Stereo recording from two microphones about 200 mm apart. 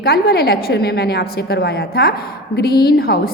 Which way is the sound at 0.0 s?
50° left (ahead or behind).